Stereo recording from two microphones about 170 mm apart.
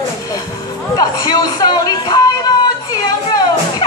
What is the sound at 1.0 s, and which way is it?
Speech, 25° left (ahead or behind).